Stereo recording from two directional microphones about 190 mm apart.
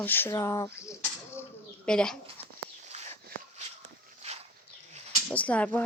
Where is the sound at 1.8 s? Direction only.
5° left (ahead or behind).